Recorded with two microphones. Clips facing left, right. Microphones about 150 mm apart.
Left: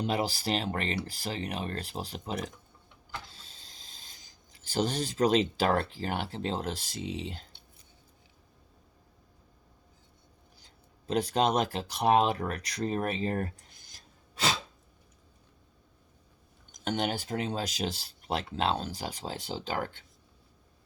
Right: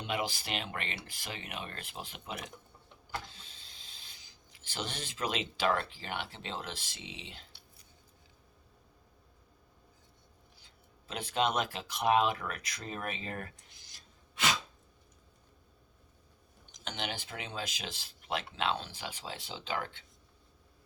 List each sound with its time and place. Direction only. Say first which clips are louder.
0.0 s speech: left 6 dB; 35° left (ahead or behind)
10.6 s speech: left 2 dB; 40° left (ahead or behind)
14.3 s a sound: left 2 dB; 30° left (ahead or behind)
16.7 s speech: left 9 dB; 45° left (ahead or behind)